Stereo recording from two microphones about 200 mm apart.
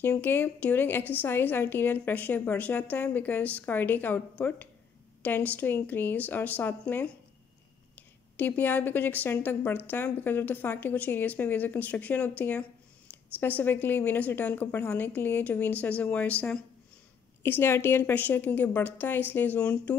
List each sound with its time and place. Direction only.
0.0 s a woman's voice: 10° left (ahead or behind)
8.4 s a woman's voice: 10° left (ahead or behind)